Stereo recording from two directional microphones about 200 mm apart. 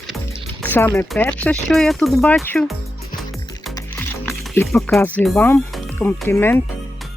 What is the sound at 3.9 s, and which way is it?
Music, 10° left (ahead or behind).